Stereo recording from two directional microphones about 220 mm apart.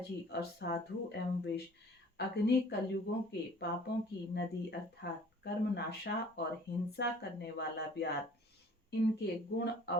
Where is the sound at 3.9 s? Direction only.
50° left (ahead or behind).